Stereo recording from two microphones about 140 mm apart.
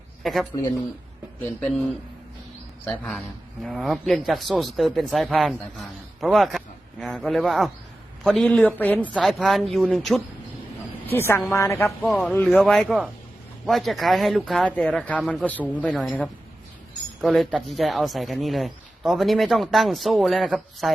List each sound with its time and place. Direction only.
0.2 s speech: centre (ahead or behind)
2.8 s a man's voice: 10° left (ahead or behind)
9.1 s a man's voice: centre (ahead or behind)
11.0 s speech: 15° left (ahead or behind)
12.0 s a man's voice: 5° left (ahead or behind)